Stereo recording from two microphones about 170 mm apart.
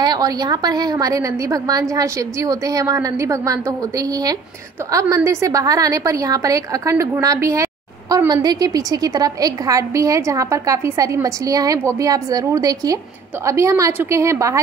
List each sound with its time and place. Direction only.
0.0 s a woman's voice: 25° right (ahead or behind)